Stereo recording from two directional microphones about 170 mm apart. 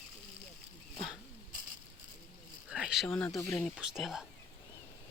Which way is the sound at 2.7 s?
5° right (ahead or behind).